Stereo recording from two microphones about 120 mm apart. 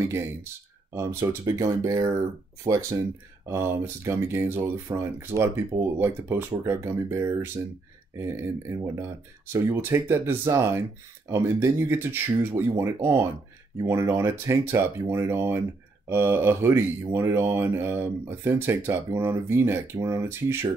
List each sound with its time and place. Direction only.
0.0 s speech: 25° right (ahead or behind)